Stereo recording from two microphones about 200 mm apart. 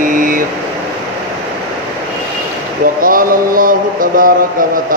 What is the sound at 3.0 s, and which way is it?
Music, 45° right (ahead or behind).